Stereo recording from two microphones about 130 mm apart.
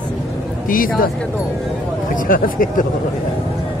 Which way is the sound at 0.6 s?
90° left.